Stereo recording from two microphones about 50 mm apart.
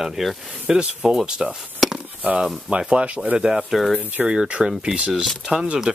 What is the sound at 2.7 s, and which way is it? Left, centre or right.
Speech, right.